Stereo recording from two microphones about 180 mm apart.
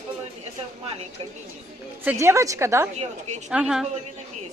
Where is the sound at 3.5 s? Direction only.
5° right (ahead or behind).